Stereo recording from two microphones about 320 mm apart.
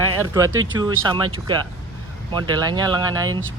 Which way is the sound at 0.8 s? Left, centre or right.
Centre.